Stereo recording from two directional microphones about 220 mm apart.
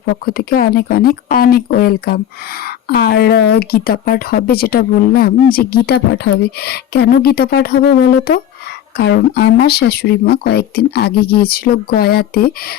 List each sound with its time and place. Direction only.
0.0 s speech: 45° left (ahead or behind)